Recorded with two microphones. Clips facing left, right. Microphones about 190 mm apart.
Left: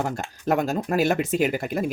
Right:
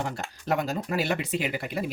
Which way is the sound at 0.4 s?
50° left (ahead or behind).